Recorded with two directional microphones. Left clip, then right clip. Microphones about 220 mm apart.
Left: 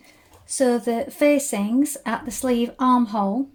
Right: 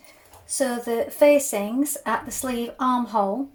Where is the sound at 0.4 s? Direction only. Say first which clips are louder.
Left 5 dB; 45° left (ahead or behind).